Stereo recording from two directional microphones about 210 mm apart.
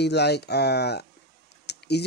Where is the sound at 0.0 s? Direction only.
50° left (ahead or behind).